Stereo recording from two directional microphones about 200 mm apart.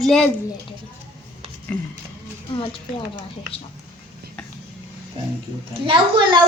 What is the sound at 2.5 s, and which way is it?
Speech, 25° left (ahead or behind).